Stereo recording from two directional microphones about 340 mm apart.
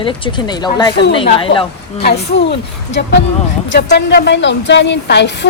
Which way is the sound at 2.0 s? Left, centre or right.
Left.